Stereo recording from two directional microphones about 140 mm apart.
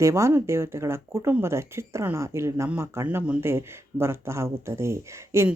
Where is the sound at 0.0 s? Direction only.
20° right (ahead or behind).